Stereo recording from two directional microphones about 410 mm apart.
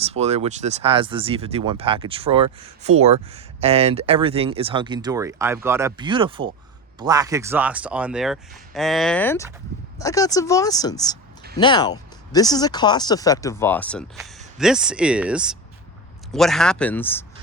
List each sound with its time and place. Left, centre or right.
0.0 s speech: centre